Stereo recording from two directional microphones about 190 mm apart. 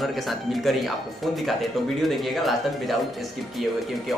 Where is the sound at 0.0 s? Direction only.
Centre (ahead or behind).